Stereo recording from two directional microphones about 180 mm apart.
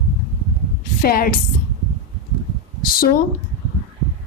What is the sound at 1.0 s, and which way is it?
Speech, 55° left (ahead or behind).